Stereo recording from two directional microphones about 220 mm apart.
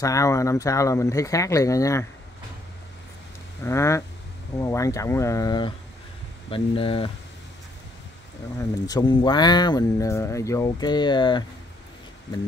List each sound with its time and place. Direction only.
0.0 s speech: 15° left (ahead or behind)
3.6 s speech: 15° left (ahead or behind)
8.5 s speech: 15° left (ahead or behind)